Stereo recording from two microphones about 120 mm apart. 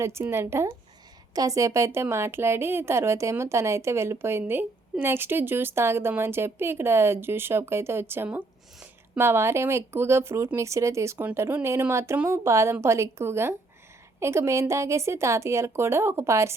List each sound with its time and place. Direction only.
0.0 s a woman's voice: 20° right (ahead or behind)